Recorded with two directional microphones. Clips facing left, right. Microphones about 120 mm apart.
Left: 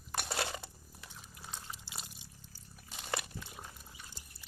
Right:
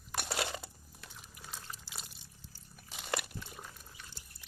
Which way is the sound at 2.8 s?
Centre (ahead or behind).